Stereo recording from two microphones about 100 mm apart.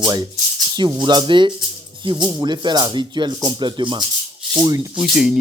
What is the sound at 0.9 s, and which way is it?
Speech, 50° right (ahead or behind).